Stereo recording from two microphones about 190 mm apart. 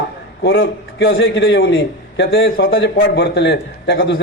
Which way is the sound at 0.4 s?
80° left.